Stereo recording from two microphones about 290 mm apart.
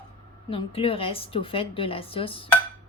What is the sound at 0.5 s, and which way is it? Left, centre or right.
A woman's voice, centre.